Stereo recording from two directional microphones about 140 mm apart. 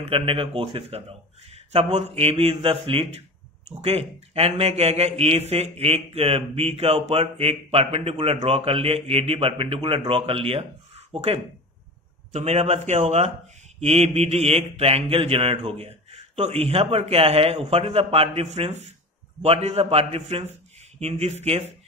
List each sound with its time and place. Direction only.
0.0 s mantra: 45° right (ahead or behind)
1.5 s speech: 50° right (ahead or behind)
2.1 s mantra: 45° right (ahead or behind)